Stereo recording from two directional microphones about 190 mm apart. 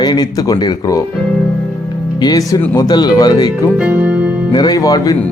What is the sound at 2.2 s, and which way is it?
Speech, 20° left (ahead or behind).